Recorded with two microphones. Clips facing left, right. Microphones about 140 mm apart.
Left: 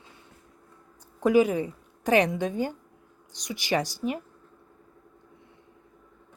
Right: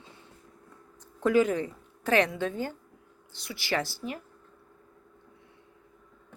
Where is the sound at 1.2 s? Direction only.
10° left (ahead or behind).